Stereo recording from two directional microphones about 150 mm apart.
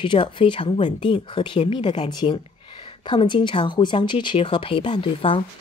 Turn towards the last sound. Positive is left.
turn(degrees=35)  # may be behind; listen again after turning